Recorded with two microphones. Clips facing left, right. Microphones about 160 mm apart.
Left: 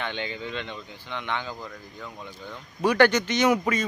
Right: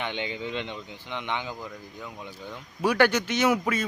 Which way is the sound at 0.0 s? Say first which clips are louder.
Even; 15° right (ahead or behind).